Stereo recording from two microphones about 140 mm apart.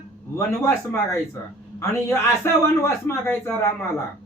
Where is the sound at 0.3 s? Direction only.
20° left (ahead or behind).